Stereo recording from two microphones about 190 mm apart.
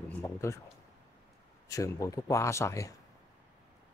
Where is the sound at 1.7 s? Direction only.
15° left (ahead or behind).